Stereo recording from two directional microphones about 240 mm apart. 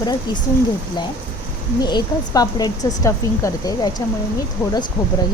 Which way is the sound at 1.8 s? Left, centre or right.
Centre.